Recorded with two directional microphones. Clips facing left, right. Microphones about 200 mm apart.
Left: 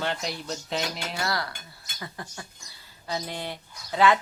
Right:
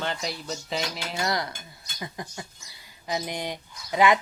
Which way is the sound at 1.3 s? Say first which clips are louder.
Right 2 dB; 20° right (ahead or behind).